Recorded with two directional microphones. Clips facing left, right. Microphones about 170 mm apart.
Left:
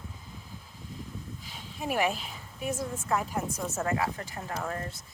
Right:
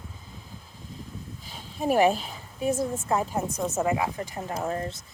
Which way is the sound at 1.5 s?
35° right (ahead or behind).